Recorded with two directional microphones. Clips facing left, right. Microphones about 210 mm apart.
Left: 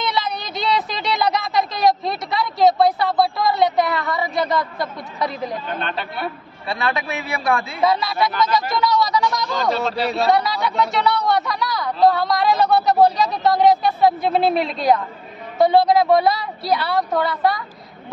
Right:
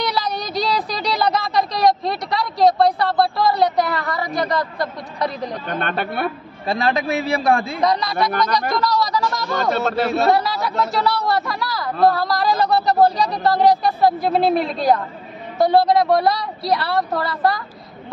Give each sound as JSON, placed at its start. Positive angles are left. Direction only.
{"t": 0.0, "sound": "speech", "side_deg": 0}
{"t": 5.8, "sound": "a man's voice", "side_deg": -55}
{"t": 6.6, "sound": "a man's voice", "side_deg": -35}
{"t": 7.8, "sound": "speech", "side_deg": 5}
{"t": 9.5, "sound": "a man's voice", "side_deg": -55}
{"t": 10.3, "sound": "speech", "side_deg": 0}